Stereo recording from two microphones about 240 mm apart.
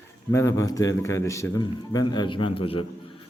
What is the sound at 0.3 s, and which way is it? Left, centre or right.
A man's voice, centre.